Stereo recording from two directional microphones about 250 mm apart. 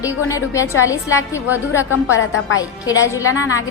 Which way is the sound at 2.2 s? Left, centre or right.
Left.